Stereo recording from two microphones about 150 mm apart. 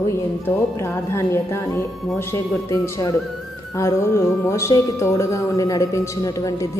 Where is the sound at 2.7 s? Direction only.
20° left (ahead or behind).